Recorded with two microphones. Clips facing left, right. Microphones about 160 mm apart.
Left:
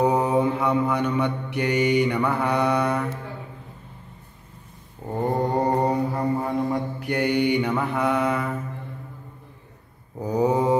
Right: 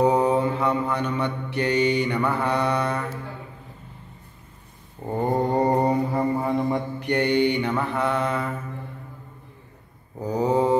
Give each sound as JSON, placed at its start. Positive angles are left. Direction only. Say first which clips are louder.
{"t": 0.0, "sound": "mantra", "louder": "right 1 dB", "side_deg": 10}
{"t": 5.1, "sound": "mantra", "louder": "right 1 dB", "side_deg": 0}
{"t": 10.2, "sound": "mantra", "louder": "even", "side_deg": 10}